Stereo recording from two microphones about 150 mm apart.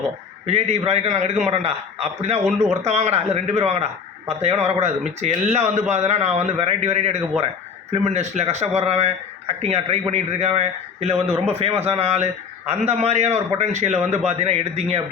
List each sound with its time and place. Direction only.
0.4 s speech: 45° right (ahead or behind)